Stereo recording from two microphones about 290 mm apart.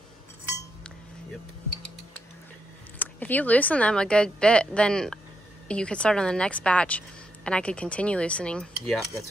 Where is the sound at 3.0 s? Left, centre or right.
Centre.